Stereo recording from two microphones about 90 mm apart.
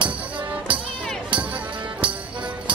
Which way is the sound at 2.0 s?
65° right (ahead or behind).